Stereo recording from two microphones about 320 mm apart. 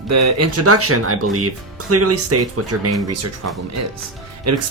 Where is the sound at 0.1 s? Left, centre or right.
Right.